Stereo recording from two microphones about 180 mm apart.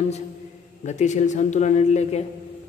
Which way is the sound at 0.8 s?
40° left (ahead or behind).